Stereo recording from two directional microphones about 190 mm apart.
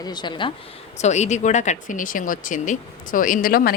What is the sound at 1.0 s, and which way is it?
A woman's voice, 35° left (ahead or behind).